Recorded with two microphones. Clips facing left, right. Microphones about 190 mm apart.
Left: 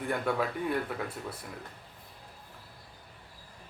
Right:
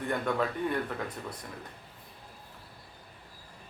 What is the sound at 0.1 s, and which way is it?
Speech, 5° left (ahead or behind).